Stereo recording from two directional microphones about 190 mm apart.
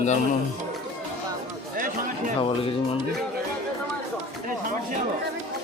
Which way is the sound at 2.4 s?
30° left (ahead or behind).